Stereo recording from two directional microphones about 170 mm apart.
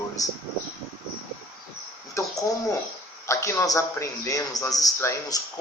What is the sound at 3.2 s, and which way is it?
A man's voice, 15° left (ahead or behind).